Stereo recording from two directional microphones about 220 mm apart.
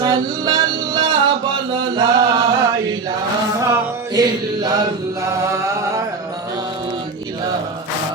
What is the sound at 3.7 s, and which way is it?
Chant, 15° right (ahead or behind).